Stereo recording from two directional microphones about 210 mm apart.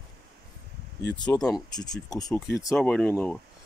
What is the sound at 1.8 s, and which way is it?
Speech, 20° left (ahead or behind).